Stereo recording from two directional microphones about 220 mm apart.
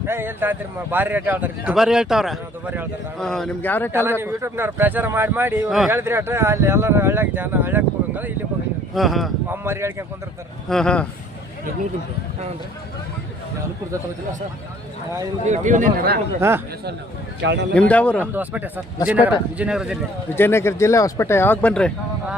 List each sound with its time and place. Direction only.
0.0 s a man's voice: 10° right (ahead or behind); by 3.9 s 10° left (ahead or behind)
3.9 s a man's voice: 10° right (ahead or behind)
9.6 s speech: 10° right (ahead or behind)
10.7 s a man's voice: 5° left (ahead or behind)
15.4 s a man's voice: 35° right (ahead or behind)
16.4 s speech: 10° right (ahead or behind)
17.4 s speech: 55° right (ahead or behind)
17.7 s a man's voice: 5° left (ahead or behind)
18.3 s a man's voice: 10° right (ahead or behind)
20.3 s speech: 10° left (ahead or behind)